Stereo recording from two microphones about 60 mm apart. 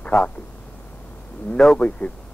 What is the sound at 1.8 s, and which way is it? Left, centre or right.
Speech, centre.